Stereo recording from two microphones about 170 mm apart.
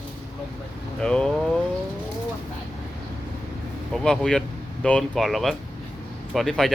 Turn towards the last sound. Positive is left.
turn(degrees=0)  # may be behind; listen again after turning